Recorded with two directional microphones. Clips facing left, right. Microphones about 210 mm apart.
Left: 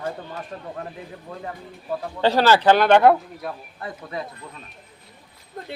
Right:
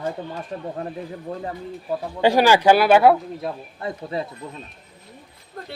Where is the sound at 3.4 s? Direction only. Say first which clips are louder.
Right 4 dB; 25° right (ahead or behind).